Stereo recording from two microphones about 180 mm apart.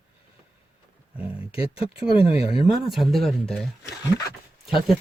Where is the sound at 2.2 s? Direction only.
30° left (ahead or behind).